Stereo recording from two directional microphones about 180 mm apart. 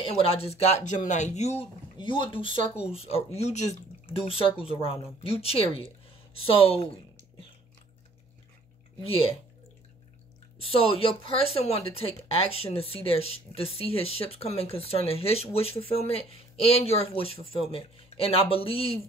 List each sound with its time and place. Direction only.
0.0 s speech: 30° left (ahead or behind)
9.0 s speech: 30° left (ahead or behind)
10.6 s speech: 30° left (ahead or behind)